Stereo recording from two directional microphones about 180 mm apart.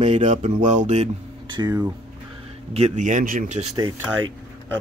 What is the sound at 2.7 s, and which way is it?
Speech, 40° right (ahead or behind).